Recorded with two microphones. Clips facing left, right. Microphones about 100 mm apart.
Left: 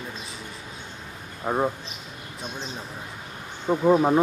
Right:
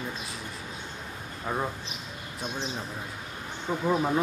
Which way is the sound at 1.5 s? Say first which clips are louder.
Left 6 dB; 30° left (ahead or behind).